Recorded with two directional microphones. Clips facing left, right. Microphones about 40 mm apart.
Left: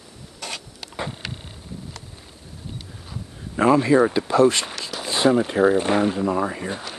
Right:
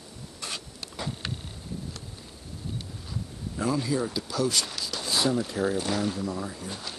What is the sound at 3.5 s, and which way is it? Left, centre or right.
Speech, left.